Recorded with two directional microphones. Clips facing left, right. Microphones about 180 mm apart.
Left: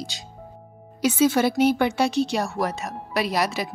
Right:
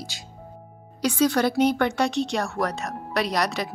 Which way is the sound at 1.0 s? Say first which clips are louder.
Left 2 dB; 5° left (ahead or behind).